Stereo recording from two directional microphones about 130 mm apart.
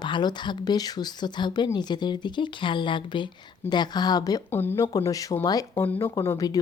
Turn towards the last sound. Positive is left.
turn(degrees=30)  # may be behind; listen again after turning